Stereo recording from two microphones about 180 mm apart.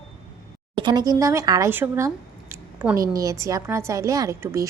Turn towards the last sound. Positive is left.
turn(degrees=-15)  # may be behind; listen again after turning